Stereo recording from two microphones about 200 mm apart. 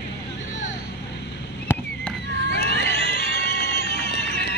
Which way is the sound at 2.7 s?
60° right (ahead or behind).